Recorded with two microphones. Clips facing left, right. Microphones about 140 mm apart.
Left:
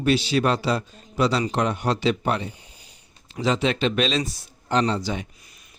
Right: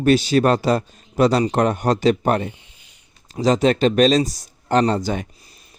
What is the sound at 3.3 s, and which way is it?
A man's voice, 40° right (ahead or behind).